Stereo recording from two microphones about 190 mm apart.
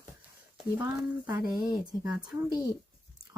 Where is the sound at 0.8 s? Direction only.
10° right (ahead or behind).